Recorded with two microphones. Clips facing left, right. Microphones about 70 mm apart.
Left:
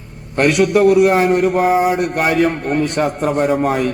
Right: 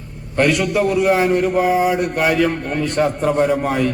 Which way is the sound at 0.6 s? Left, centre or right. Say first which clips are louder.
Left 6 dB; left.